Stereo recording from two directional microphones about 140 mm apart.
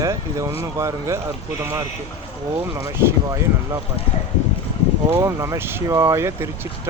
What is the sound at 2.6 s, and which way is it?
Speech, 15° right (ahead or behind).